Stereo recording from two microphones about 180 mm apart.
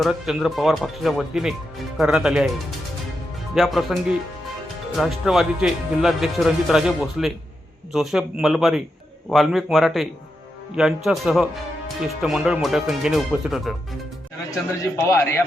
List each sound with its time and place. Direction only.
0.0 s speech: centre (ahead or behind)
4.9 s speech: centre (ahead or behind)
14.9 s a man's voice: 15° left (ahead or behind)